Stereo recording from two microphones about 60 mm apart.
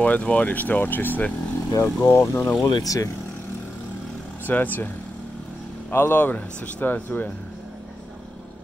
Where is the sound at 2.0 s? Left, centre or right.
Left.